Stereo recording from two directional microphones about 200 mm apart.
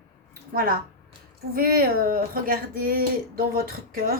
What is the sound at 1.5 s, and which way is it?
A woman's voice, 45° right (ahead or behind).